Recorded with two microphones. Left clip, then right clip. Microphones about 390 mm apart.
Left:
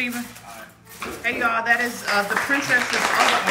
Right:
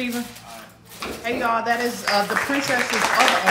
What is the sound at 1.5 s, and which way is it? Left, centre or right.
Speech, centre.